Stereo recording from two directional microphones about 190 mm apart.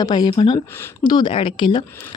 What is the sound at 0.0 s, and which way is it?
Speech, 20° left (ahead or behind).